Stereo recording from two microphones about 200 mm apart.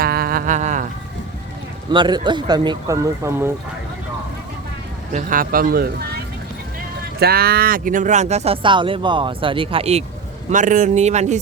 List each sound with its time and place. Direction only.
0.0 s music: 50° right (ahead or behind)
1.9 s speech: 20° right (ahead or behind)
5.1 s speech: 45° right (ahead or behind)
7.2 s speech: 50° right (ahead or behind)